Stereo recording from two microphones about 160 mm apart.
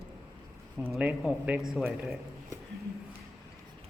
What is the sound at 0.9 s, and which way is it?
Speech, 10° right (ahead or behind).